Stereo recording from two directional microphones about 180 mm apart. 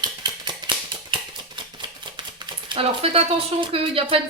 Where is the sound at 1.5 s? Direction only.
25° right (ahead or behind).